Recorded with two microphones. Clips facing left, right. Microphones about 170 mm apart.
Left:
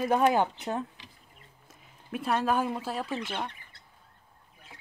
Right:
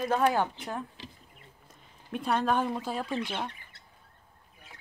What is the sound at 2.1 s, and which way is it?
Speech, 5° left (ahead or behind).